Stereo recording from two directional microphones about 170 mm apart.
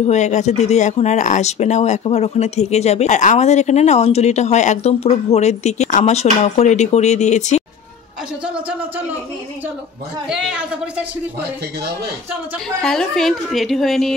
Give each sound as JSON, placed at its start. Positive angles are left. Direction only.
{"t": 0.0, "sound": "speech", "side_deg": 45}
{"t": 8.5, "sound": "speech", "side_deg": -10}
{"t": 10.2, "sound": "a woman's voice", "side_deg": -5}
{"t": 12.8, "sound": "a woman's voice", "side_deg": 5}